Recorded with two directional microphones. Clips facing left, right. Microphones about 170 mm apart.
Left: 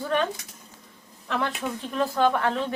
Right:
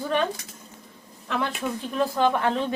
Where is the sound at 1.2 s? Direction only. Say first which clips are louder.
Right 1 dB; centre (ahead or behind).